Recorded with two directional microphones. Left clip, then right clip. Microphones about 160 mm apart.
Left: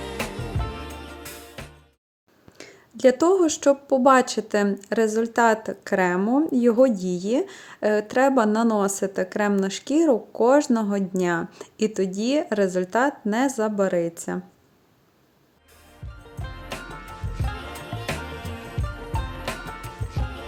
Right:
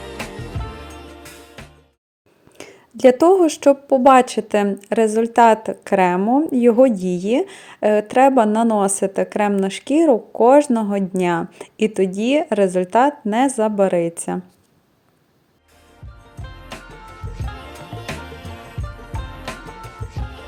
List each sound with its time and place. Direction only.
0.2 s music: centre (ahead or behind)
2.6 s a woman's voice: 25° right (ahead or behind)
16.4 s music: centre (ahead or behind)